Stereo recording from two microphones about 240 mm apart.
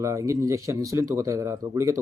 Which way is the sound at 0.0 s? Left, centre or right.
Centre.